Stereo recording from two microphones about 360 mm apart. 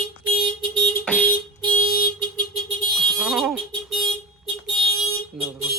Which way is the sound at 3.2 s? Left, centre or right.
Centre.